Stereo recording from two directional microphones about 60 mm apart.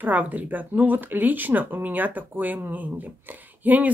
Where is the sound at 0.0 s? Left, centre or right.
Right.